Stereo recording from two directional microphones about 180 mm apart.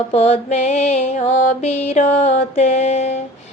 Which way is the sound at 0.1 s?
35° left (ahead or behind).